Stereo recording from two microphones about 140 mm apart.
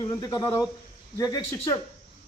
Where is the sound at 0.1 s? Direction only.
30° left (ahead or behind).